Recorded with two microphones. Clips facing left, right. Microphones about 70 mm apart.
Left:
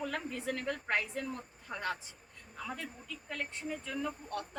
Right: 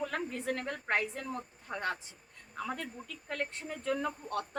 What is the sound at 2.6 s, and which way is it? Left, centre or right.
Speech, right.